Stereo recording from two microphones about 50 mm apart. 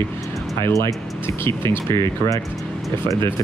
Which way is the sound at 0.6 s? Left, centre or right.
Left.